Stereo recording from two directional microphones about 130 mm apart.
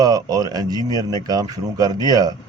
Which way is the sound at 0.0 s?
30° right (ahead or behind).